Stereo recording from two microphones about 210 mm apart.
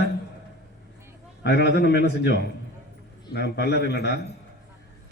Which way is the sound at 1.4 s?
55° left (ahead or behind).